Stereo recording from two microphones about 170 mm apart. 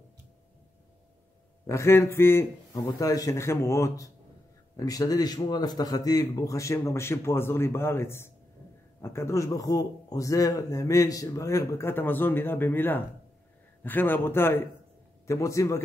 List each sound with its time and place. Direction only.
1.7 s a man's voice: 15° left (ahead or behind)